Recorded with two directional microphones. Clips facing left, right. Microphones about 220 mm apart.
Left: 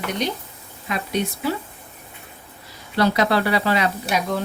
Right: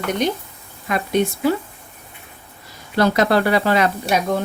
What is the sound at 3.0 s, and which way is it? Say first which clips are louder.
Speech: right 3 dB; 50° right (ahead or behind).